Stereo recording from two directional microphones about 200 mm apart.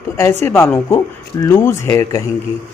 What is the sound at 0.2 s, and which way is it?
Speech, 10° left (ahead or behind).